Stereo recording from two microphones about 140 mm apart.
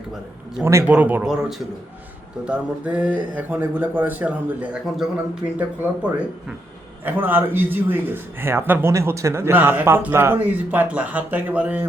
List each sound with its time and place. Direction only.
0.6 s speech: 20° right (ahead or behind)